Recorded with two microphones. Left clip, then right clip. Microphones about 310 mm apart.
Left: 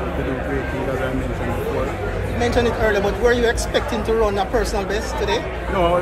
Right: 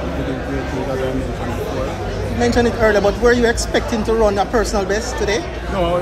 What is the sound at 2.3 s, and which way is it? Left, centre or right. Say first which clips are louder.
Speech: right 3 dB; right.